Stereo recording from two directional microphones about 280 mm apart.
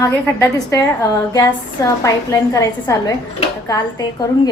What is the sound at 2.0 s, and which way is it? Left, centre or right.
A woman's voice, centre.